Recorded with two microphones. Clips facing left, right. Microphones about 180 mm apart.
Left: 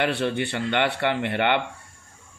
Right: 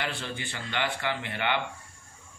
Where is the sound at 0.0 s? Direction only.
65° left (ahead or behind).